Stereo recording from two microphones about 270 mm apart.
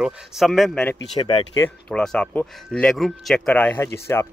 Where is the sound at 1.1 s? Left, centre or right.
Centre.